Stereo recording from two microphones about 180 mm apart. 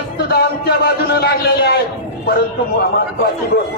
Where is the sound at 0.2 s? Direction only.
60° left (ahead or behind).